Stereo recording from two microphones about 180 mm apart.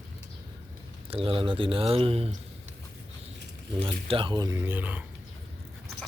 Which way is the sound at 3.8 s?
30° right (ahead or behind).